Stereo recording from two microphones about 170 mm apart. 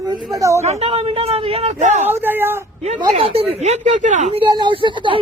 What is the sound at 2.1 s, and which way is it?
Speech, 10° right (ahead or behind).